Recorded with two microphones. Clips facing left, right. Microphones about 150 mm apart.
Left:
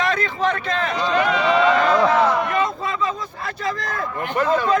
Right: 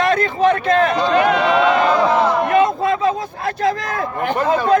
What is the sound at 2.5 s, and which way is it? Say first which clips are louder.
Speech: right 7 dB; 60° right (ahead or behind).